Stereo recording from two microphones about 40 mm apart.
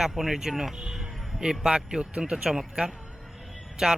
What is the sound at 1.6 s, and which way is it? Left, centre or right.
Speech, right.